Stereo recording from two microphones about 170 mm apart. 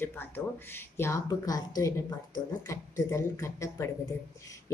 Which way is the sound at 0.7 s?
15° left (ahead or behind).